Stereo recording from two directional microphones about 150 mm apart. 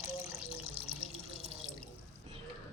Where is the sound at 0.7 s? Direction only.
40° right (ahead or behind).